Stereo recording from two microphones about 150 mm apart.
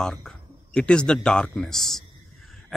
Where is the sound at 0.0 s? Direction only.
5° left (ahead or behind).